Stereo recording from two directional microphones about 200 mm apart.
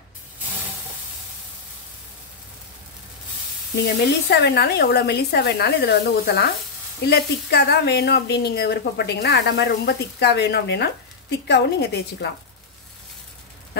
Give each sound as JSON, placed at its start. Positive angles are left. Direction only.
{"t": 3.8, "sound": "speech", "side_deg": 55}